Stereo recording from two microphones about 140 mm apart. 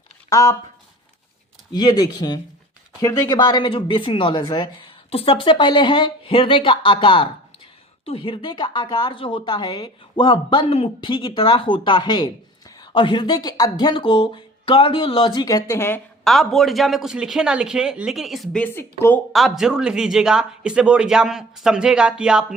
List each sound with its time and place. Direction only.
0.3 s speech: 20° left (ahead or behind)
1.7 s a woman's voice: 30° left (ahead or behind)
5.1 s a woman's voice: 40° left (ahead or behind); by 16.0 s 20° left (ahead or behind)
16.2 s speech: centre (ahead or behind)
18.6 s speech: 15° left (ahead or behind)
19.3 s speech: centre (ahead or behind)